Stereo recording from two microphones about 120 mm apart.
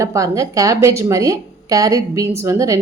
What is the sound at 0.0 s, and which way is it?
A woman's voice, 25° right (ahead or behind).